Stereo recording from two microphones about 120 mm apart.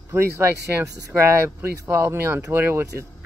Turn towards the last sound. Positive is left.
turn(degrees=-20)  # may be behind; listen again after turning